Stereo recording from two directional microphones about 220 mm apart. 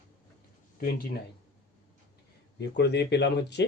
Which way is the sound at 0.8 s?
45° left (ahead or behind).